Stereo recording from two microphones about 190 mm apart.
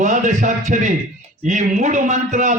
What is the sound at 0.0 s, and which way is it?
A man's voice, 40° right (ahead or behind).